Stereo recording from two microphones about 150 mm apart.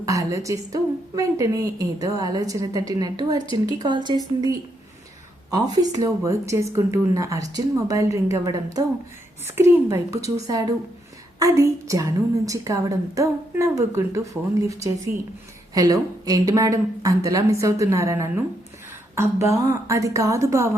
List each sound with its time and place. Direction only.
0.0 s a woman's voice: 20° right (ahead or behind)
5.5 s a woman's voice: 25° right (ahead or behind)